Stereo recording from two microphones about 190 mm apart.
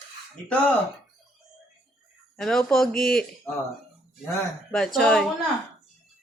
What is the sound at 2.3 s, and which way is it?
Speech, centre (ahead or behind).